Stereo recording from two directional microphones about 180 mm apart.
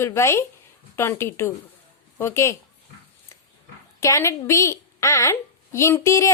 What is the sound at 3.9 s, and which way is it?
A woman's voice, 15° left (ahead or behind).